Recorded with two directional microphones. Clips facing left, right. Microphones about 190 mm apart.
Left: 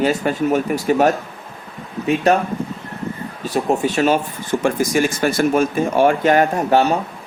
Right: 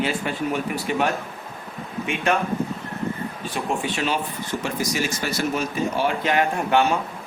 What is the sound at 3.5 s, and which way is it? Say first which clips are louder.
Speech: left 9 dB; 40° left (ahead or behind).